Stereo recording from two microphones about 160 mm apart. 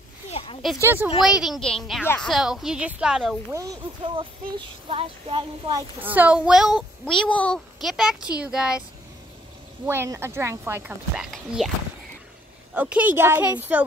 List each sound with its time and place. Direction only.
0.3 s a sound: 35° left (ahead or behind)
0.8 s a child's voice: 10° right (ahead or behind)
4.0 s speech: 30° right (ahead or behind)
5.9 s a child's voice: 10° right (ahead or behind)
9.8 s speech: 15° right (ahead or behind)
12.7 s speech: 10° right (ahead or behind)